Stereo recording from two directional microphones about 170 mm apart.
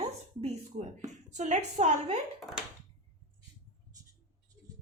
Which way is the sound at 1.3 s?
45° right (ahead or behind).